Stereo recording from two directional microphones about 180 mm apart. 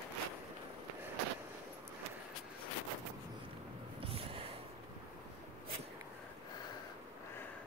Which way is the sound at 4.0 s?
30° right (ahead or behind).